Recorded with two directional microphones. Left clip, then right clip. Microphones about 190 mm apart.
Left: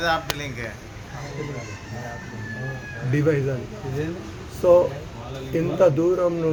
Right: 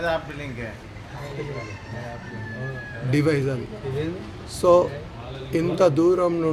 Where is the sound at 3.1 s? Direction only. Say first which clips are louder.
Even; 25° right (ahead or behind).